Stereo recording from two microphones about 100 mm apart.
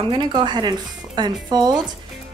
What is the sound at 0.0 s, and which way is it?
A woman's voice, 50° right (ahead or behind).